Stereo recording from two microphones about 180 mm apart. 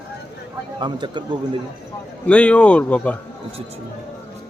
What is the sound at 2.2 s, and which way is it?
Speech, 5° left (ahead or behind).